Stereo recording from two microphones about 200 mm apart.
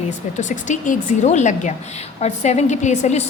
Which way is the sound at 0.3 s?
40° left (ahead or behind).